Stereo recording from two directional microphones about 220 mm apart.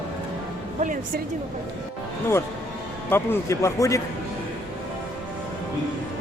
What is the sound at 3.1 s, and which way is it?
Speech, 10° left (ahead or behind).